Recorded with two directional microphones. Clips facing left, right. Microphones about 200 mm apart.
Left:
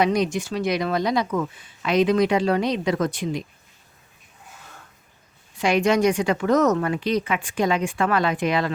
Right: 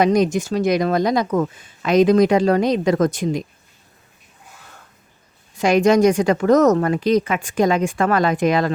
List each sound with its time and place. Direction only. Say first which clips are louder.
0.0 s speech: right 5 dB; 45° right (ahead or behind)
5.5 s speech: right 5 dB; 45° right (ahead or behind)